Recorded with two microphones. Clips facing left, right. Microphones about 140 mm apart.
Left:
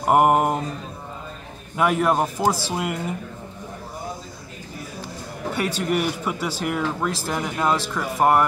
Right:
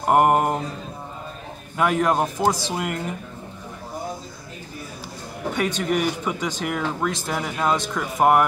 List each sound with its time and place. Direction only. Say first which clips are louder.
0.0 s speech: even; centre (ahead or behind)
1.8 s speech: even; 5° left (ahead or behind)
5.8 s speech: even; 5° left (ahead or behind)